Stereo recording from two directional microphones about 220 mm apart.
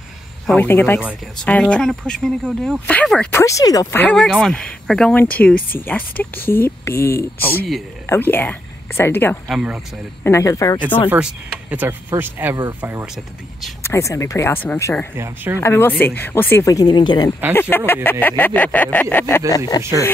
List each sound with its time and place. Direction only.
0.5 s speech: 10° left (ahead or behind)
9.5 s speech: 5° right (ahead or behind)
10.2 s speech: 15° left (ahead or behind)
11.1 s speech: 5° right (ahead or behind)
13.8 s speech: 15° left (ahead or behind)
15.1 s speech: 10° right (ahead or behind)
15.6 s speech: 10° left (ahead or behind)